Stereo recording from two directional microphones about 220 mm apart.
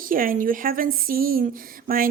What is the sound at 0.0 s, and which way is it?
A woman's voice, 40° right (ahead or behind).